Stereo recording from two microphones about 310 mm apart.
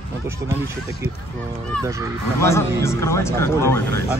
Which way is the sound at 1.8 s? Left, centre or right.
Centre.